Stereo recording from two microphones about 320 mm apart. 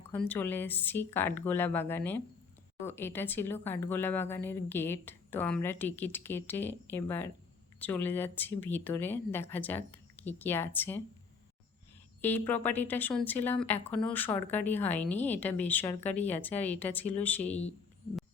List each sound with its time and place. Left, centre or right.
0.1 s speech: centre
12.2 s speech: centre
17.5 s speech: centre